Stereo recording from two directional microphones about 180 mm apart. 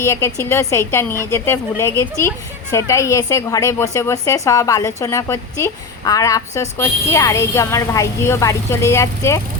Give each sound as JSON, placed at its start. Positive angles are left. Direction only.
{"t": 0.0, "sound": "a woman's voice", "side_deg": 15}